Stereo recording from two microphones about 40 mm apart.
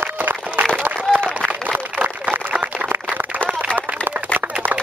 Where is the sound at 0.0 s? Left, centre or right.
Right.